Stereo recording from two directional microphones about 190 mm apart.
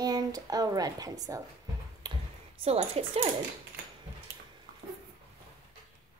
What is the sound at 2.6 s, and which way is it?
Speech, 30° right (ahead or behind).